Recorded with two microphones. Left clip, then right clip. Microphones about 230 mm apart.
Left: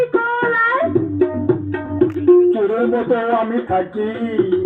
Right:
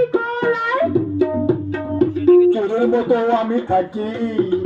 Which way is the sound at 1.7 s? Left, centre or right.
Right.